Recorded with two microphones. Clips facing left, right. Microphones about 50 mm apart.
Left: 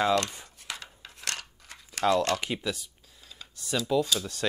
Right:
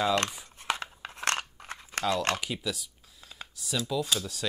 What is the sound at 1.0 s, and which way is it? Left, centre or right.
Scissors, right.